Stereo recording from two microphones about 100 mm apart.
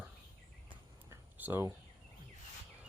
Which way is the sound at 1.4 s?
20° right (ahead or behind).